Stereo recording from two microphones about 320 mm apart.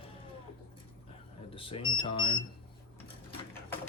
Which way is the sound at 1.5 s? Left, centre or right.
Centre.